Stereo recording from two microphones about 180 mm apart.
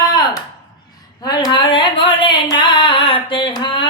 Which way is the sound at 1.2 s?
20° left (ahead or behind).